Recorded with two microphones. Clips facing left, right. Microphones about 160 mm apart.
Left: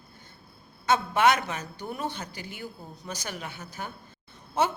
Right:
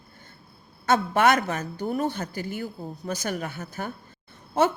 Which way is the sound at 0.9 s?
50° right (ahead or behind).